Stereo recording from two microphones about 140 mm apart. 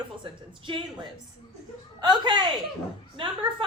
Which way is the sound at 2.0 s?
30° right (ahead or behind).